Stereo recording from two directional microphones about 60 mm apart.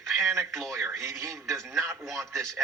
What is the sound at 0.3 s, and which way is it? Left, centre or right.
A man's voice, right.